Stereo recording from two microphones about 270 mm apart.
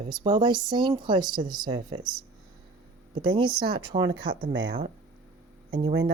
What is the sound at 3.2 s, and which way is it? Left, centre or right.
Speech, centre.